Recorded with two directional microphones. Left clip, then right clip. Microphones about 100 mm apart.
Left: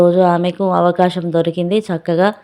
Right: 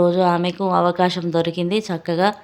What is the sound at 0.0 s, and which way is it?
Speech, 40° left (ahead or behind).